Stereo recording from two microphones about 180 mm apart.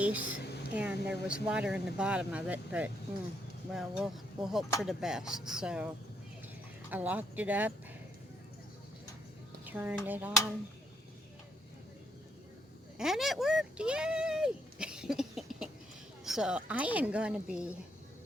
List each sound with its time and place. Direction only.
0.0 s a woman's voice: 10° right (ahead or behind)
6.9 s speech: 10° right (ahead or behind)
9.6 s speech: 10° right (ahead or behind)
13.0 s a woman's voice: centre (ahead or behind)